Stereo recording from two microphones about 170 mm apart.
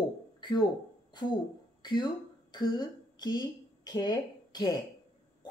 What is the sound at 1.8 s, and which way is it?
A woman's voice, 25° left (ahead or behind).